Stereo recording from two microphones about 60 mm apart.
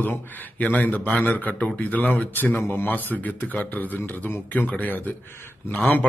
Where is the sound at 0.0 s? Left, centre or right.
Left.